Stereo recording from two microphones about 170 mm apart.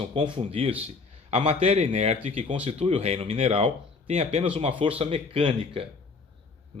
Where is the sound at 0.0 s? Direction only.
30° right (ahead or behind).